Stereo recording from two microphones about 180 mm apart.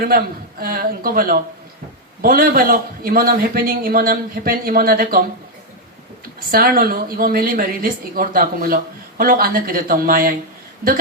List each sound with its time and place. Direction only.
0.6 s a woman's voice: 55° right (ahead or behind)
6.5 s a woman's voice: 55° right (ahead or behind)